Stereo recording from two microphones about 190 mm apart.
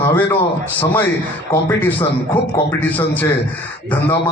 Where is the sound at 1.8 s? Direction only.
10° left (ahead or behind).